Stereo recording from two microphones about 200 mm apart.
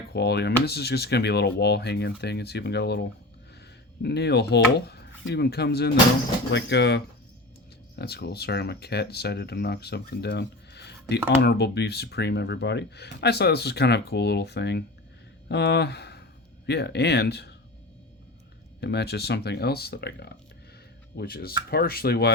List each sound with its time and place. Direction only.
0.1 s speech: 55° left (ahead or behind)
4.0 s speech: 55° left (ahead or behind)
18.8 s speech: 55° left (ahead or behind)